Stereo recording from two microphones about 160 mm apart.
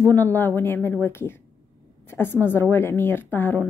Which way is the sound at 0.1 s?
10° left (ahead or behind).